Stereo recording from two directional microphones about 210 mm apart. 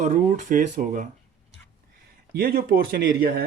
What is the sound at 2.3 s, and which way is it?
Speech, 45° right (ahead or behind).